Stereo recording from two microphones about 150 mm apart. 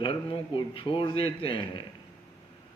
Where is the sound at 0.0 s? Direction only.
35° left (ahead or behind).